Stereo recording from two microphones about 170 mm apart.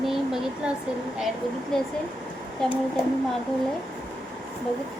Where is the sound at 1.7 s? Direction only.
5° left (ahead or behind).